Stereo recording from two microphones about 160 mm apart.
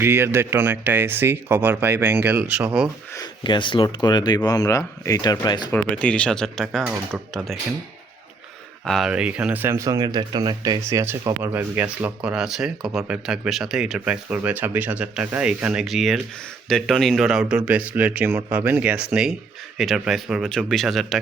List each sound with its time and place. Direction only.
0.0 s speech: 15° right (ahead or behind)
3.2 s speech: 30° left (ahead or behind)
5.7 s speech: 10° left (ahead or behind)
8.9 s speech: 5° right (ahead or behind)